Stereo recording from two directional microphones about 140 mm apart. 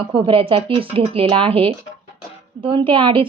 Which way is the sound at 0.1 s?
40° right (ahead or behind).